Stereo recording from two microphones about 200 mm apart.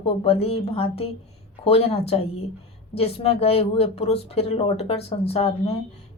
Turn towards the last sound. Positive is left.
turn(degrees=30)  # may be behind; listen again after turning